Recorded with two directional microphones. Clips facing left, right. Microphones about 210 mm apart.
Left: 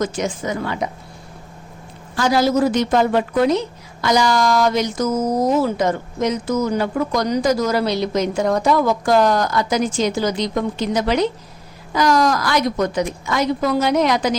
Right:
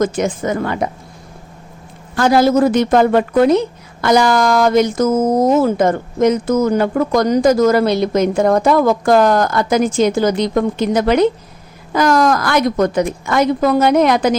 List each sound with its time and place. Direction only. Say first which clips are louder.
0.0 s speech: right 5 dB; 50° right (ahead or behind)
2.1 s speech: right 5 dB; 55° right (ahead or behind)